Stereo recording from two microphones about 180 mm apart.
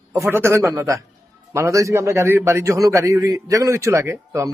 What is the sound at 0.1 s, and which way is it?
A man's voice, 15° right (ahead or behind).